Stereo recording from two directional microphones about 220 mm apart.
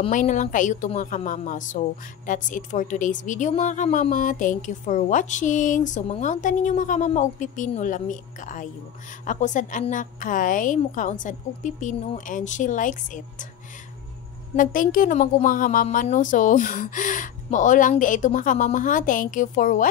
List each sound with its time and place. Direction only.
0.0 s a woman's voice: 35° left (ahead or behind)
14.6 s a woman's voice: 40° left (ahead or behind)